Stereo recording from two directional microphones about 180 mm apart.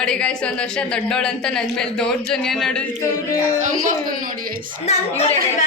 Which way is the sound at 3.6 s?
45° right (ahead or behind).